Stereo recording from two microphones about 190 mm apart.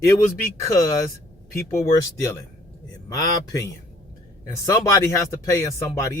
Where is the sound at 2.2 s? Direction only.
15° left (ahead or behind).